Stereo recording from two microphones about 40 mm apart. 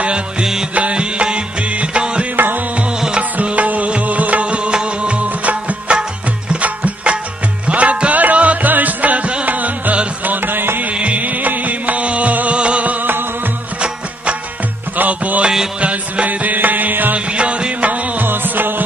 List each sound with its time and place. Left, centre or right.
0.4 s music: centre
0.7 s music: right
2.3 s music: right
3.2 s music: right
10.2 s music: right
10.8 s music: right
13.7 s music: right
15.0 s music: right
17.1 s music: right
18.2 s music: right